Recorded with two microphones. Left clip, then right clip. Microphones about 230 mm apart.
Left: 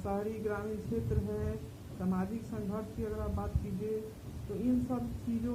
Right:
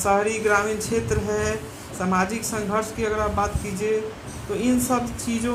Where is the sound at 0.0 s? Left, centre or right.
Centre.